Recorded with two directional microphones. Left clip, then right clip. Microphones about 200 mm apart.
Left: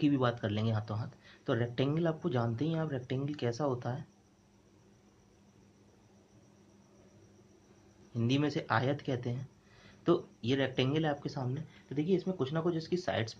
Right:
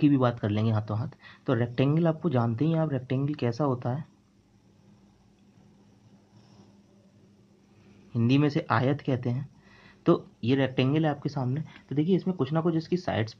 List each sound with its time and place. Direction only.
0.0 s speech: 25° right (ahead or behind)
8.1 s speech: 30° right (ahead or behind)